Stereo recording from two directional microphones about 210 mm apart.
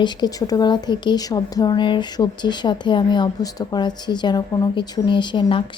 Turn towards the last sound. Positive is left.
turn(degrees=20)  # may be behind; listen again after turning